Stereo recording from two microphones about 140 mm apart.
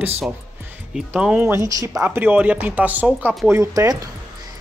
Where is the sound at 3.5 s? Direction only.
25° right (ahead or behind).